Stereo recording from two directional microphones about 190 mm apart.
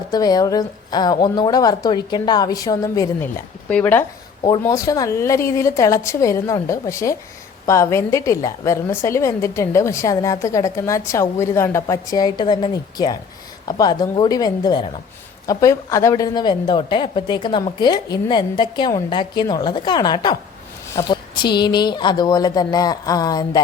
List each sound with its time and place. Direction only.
0.1 s a woman's voice: 20° left (ahead or behind)